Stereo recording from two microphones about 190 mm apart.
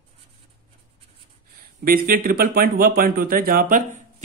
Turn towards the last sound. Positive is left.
turn(degrees=-45)  # may be behind; listen again after turning